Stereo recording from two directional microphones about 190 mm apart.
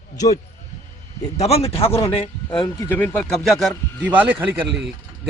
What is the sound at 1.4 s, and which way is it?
Speech, 35° left (ahead or behind).